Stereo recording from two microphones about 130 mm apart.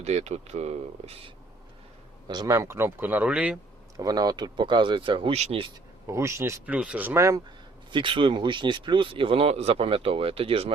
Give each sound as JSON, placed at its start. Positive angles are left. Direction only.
{"t": 0.0, "sound": "speech", "side_deg": -55}
{"t": 2.2, "sound": "a man's voice", "side_deg": -35}
{"t": 3.9, "sound": "speech", "side_deg": -30}
{"t": 6.1, "sound": "speech", "side_deg": -20}
{"t": 6.7, "sound": "a man's voice", "side_deg": -10}
{"t": 7.9, "sound": "speech", "side_deg": -40}